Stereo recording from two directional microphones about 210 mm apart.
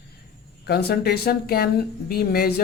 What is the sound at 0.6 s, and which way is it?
Speech, 50° left (ahead or behind).